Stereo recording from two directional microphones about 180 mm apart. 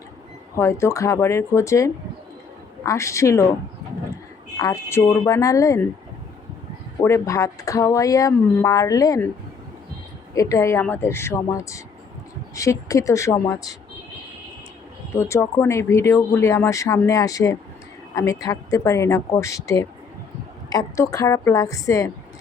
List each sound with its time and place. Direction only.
0.5 s speech: 15° left (ahead or behind)
4.5 s speech: 15° left (ahead or behind)
7.0 s speech: 15° left (ahead or behind)
10.3 s speech: 20° left (ahead or behind)
15.1 s speech: 15° left (ahead or behind)